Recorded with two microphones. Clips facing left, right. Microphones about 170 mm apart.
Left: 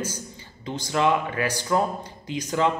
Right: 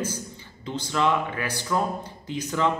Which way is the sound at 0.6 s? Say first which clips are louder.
Left 1 dB; 15° left (ahead or behind).